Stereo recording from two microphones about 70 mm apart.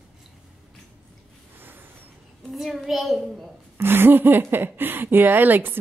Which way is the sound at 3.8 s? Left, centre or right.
Right.